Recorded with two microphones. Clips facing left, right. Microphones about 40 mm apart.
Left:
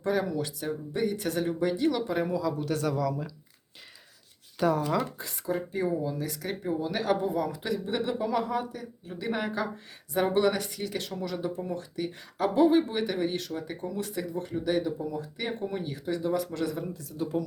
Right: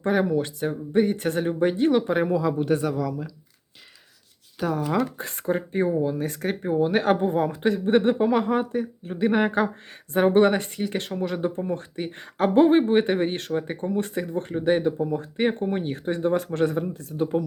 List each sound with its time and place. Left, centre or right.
0.0 s speech: right
2.9 s speech: centre
4.5 s speech: centre
5.1 s speech: right